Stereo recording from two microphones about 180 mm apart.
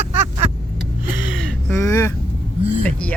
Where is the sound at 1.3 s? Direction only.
5° left (ahead or behind).